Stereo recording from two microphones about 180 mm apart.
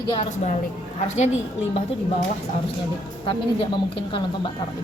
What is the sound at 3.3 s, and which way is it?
A woman's voice, 25° left (ahead or behind).